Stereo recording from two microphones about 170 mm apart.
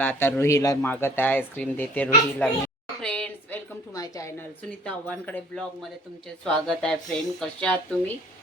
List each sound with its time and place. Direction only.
0.0 s speech: 10° left (ahead or behind)
3.0 s a sound: 5° left (ahead or behind)
3.9 s speech: 20° left (ahead or behind)
4.9 s speech: 10° left (ahead or behind)